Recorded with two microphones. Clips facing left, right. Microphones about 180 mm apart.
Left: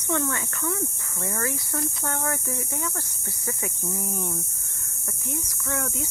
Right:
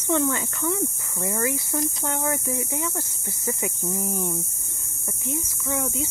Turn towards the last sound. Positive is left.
turn(degrees=-20)  # may be behind; listen again after turning